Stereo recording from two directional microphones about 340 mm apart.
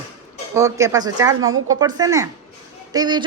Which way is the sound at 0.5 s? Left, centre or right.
Centre.